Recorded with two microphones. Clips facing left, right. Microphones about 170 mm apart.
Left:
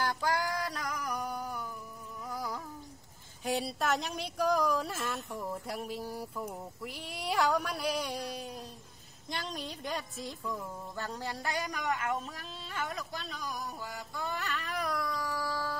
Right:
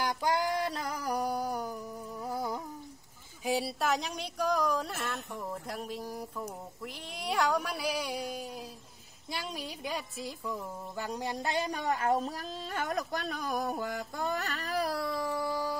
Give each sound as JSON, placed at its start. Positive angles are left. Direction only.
{"t": 0.0, "sound": "a sound", "side_deg": -20}
{"t": 3.4, "sound": "cat", "side_deg": -5}
{"t": 9.3, "sound": "speech", "side_deg": -5}